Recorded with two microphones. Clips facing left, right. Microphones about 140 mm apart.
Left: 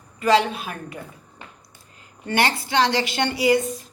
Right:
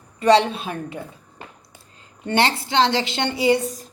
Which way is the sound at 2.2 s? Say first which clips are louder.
Right 2 dB; 25° right (ahead or behind).